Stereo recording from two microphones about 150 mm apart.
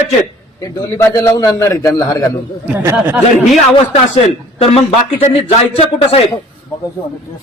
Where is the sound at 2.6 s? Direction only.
10° right (ahead or behind).